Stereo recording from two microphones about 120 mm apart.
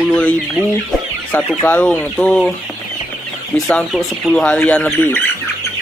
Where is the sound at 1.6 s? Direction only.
15° left (ahead or behind).